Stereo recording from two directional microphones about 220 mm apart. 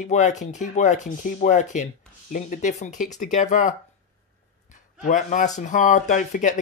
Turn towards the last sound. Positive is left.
turn(degrees=35)  # may be behind; listen again after turning